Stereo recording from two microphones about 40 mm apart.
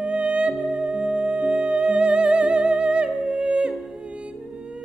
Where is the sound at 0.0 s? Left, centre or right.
Right.